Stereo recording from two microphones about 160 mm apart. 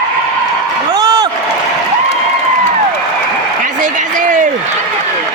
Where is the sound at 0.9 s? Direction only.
25° right (ahead or behind).